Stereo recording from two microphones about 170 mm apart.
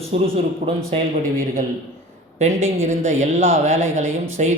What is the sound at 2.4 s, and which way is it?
A man's voice, 45° right (ahead or behind).